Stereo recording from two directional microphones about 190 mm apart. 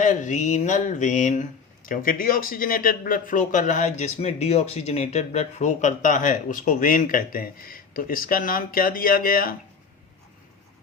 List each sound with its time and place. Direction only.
0.0 s speech: 40° left (ahead or behind)